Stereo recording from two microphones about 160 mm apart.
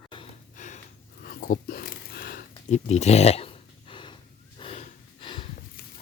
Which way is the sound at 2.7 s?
45° left (ahead or behind).